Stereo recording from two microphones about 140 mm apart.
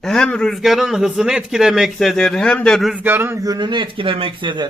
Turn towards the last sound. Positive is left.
turn(degrees=-35)  # may be behind; listen again after turning